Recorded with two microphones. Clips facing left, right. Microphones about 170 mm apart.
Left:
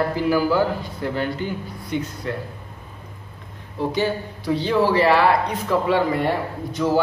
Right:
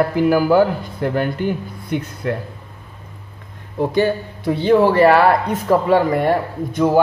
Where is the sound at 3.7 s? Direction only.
50° right (ahead or behind).